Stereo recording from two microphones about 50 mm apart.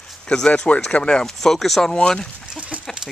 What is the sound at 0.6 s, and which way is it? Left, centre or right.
Speech, left.